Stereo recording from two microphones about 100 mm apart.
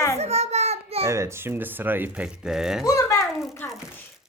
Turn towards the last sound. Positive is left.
turn(degrees=20)  # may be behind; listen again after turning